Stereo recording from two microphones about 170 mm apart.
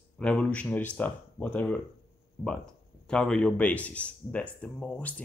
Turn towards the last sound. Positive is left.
turn(degrees=10)  # may be behind; listen again after turning